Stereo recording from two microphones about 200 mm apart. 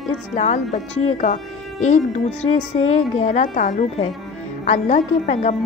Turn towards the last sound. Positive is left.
turn(degrees=35)  # may be behind; listen again after turning